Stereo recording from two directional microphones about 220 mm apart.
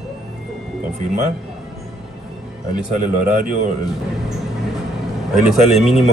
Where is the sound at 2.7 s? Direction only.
35° right (ahead or behind).